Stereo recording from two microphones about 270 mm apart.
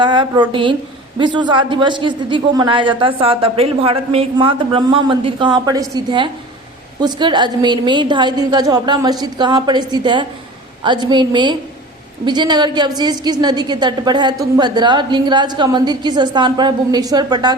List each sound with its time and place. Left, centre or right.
0.0 s a woman's voice: centre